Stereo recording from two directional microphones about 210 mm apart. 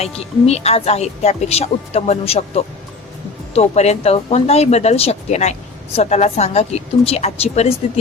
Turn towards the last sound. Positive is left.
turn(degrees=30)  # may be behind; listen again after turning